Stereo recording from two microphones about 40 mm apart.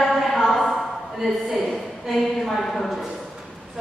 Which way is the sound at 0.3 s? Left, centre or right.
Centre.